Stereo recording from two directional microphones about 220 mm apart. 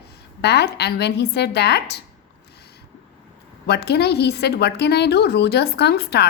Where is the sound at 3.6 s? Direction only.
50° left (ahead or behind).